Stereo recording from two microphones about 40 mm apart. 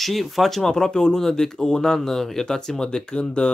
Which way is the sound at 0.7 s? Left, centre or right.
Centre.